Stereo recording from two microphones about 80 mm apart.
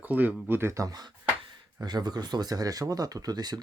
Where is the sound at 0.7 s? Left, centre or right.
Right.